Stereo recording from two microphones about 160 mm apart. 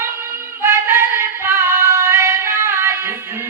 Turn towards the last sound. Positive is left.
turn(degrees=-15)  # may be behind; listen again after turning